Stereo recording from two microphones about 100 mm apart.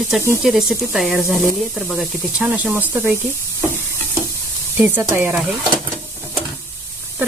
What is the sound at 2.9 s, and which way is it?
Stir, 15° right (ahead or behind).